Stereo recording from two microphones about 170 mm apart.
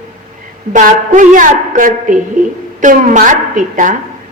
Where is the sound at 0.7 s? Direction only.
50° right (ahead or behind).